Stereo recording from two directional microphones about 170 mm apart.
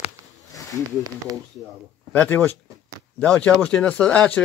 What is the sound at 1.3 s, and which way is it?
Speech, 20° right (ahead or behind).